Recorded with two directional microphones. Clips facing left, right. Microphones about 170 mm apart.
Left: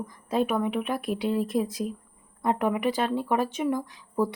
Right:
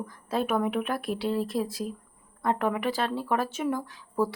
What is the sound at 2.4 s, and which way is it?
Speech, 15° left (ahead or behind).